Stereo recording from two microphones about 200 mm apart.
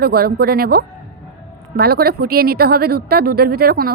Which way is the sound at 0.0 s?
50° right (ahead or behind).